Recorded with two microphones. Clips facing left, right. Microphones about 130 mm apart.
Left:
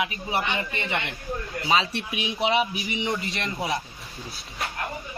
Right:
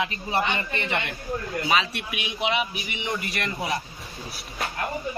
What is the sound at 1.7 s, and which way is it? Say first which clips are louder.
A man's voice: left 2 dB; 30° left (ahead or behind).